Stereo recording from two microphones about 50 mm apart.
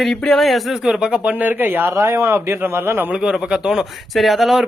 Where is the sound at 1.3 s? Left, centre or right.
Right.